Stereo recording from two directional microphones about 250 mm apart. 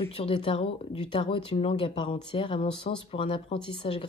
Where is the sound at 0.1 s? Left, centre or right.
Left.